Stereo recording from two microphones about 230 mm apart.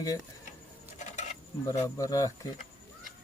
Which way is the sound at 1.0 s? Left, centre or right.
Left.